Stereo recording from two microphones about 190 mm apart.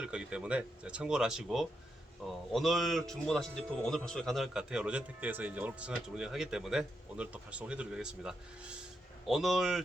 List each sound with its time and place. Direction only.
0.0 s speech: 5° right (ahead or behind)